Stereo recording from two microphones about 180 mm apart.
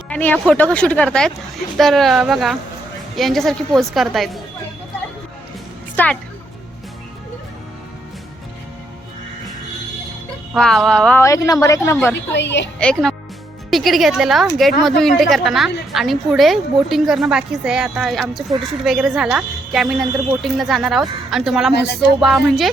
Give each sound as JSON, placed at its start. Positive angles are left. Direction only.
{"t": 0.1, "sound": "a woman's voice", "side_deg": 10}
{"t": 6.0, "sound": "a woman's voice", "side_deg": 10}
{"t": 10.5, "sound": "a woman's voice", "side_deg": 0}
{"t": 11.2, "sound": "a woman's voice", "side_deg": 15}
{"t": 12.1, "sound": "a woman's voice", "side_deg": 75}
{"t": 12.8, "sound": "a woman's voice", "side_deg": 0}